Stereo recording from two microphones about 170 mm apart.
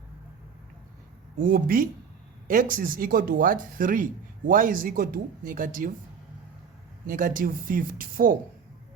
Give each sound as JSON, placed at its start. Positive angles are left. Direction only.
{"t": 1.4, "sound": "speech", "side_deg": -55}
{"t": 7.1, "sound": "speech", "side_deg": -50}